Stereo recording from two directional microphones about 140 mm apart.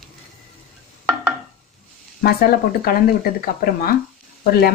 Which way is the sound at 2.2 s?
90° left.